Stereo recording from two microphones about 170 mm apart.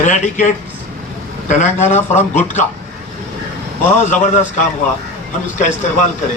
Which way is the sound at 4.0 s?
45° left (ahead or behind).